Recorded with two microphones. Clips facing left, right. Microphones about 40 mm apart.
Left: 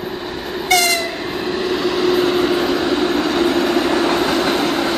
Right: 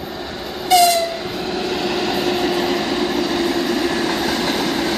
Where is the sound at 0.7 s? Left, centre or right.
Left.